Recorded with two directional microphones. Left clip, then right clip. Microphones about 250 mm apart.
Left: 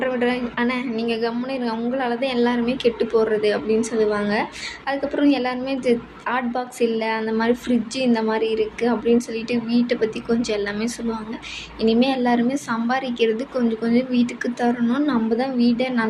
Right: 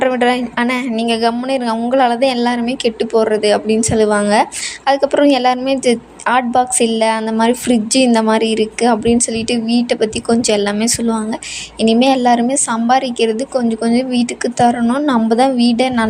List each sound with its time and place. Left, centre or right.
0.0 s a woman's voice: right